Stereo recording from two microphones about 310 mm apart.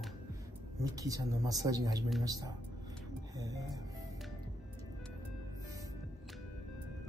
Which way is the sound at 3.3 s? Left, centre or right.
Centre.